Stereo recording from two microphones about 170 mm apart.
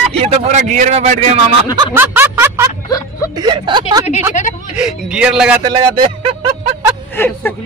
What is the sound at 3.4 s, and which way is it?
Speech, 25° right (ahead or behind).